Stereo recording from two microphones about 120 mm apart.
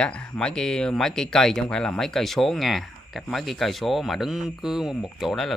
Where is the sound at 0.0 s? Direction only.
10° left (ahead or behind).